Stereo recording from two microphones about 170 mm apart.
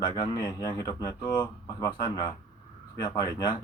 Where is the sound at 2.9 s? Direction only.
20° left (ahead or behind).